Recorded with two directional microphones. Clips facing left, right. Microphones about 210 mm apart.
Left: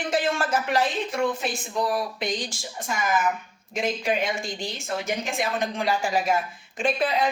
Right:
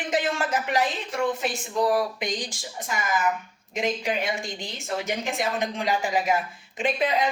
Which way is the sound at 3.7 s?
15° right (ahead or behind).